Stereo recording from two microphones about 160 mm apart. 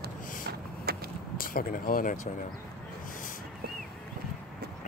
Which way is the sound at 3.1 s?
55° left (ahead or behind).